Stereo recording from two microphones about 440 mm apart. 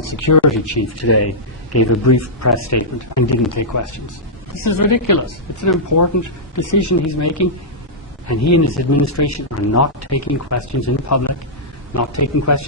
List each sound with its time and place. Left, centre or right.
0.0 s a woman's voice: left